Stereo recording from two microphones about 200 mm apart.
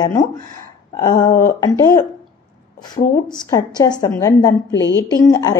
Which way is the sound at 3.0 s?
50° left (ahead or behind).